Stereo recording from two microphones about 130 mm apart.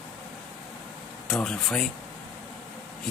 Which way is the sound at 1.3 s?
5° left (ahead or behind).